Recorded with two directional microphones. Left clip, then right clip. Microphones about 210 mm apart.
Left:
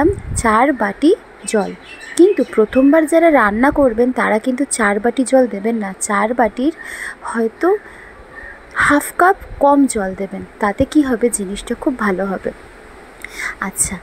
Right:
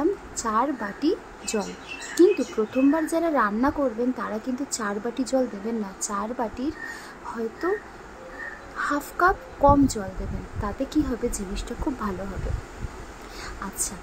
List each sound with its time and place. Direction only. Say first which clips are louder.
0.0 s a woman's voice: left 11 dB; 30° left (ahead or behind)
8.7 s speech: left 13 dB; 30° left (ahead or behind)
13.4 s speech: left 12 dB; 30° left (ahead or behind)